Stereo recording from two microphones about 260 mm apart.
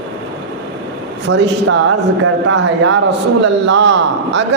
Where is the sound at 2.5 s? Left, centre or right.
Right.